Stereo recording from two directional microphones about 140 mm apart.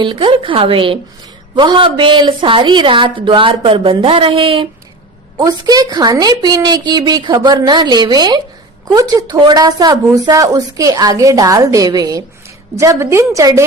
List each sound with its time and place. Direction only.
0.0 s a woman's voice: 35° right (ahead or behind)
5.4 s speech: 25° right (ahead or behind)